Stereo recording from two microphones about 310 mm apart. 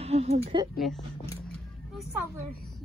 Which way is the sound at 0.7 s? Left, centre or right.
Centre.